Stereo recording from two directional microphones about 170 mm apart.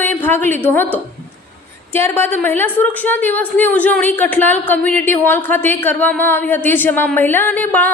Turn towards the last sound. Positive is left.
turn(degrees=10)  # may be behind; listen again after turning